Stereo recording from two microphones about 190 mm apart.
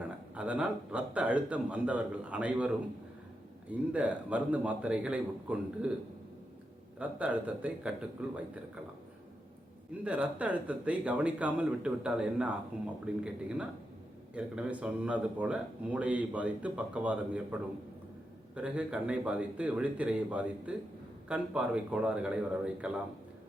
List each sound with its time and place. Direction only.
0.0 s speech: 5° right (ahead or behind)
7.0 s a man's voice: 5° right (ahead or behind)
10.0 s a man's voice: 5° right (ahead or behind)